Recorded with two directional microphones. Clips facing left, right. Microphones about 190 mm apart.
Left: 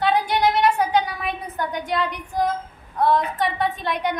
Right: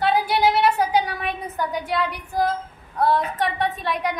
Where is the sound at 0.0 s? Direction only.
5° right (ahead or behind).